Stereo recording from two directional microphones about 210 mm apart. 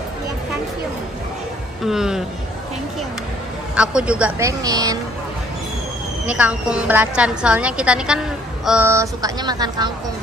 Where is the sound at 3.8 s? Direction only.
5° right (ahead or behind).